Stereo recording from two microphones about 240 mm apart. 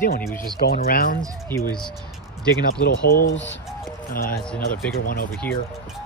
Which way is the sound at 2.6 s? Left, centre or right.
Left.